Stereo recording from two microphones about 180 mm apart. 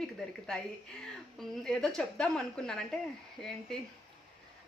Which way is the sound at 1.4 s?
5° left (ahead or behind).